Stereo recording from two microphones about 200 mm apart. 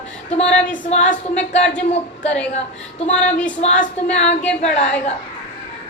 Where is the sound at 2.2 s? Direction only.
5° left (ahead or behind).